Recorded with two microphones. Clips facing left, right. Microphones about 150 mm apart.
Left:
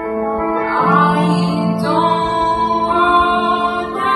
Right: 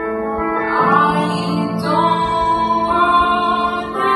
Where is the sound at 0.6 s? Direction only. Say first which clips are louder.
Even; centre (ahead or behind).